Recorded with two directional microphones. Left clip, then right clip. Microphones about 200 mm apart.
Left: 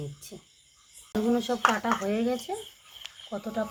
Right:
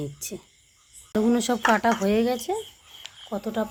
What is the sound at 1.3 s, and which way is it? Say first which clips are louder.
Speech: right 2 dB; 55° right (ahead or behind).